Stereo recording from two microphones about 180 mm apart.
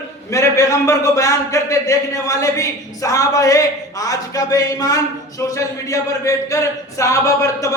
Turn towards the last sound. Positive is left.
turn(degrees=15)  # may be behind; listen again after turning